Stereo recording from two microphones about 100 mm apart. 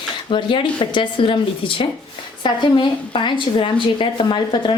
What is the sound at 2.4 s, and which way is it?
A woman's voice, 45° left (ahead or behind).